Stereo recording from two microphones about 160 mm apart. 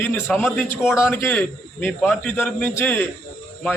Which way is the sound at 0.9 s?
15° left (ahead or behind).